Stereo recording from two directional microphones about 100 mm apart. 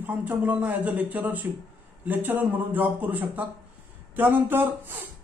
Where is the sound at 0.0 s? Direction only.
15° right (ahead or behind).